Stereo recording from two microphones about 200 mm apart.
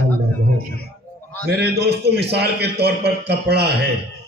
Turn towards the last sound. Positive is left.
turn(degrees=-55)  # may be behind; listen again after turning